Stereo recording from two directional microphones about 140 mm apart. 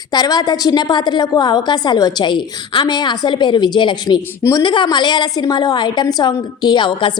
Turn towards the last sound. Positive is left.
turn(degrees=35)  # may be behind; listen again after turning